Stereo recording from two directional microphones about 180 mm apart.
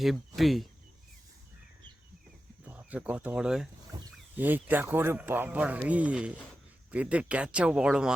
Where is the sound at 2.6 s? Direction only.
10° right (ahead or behind).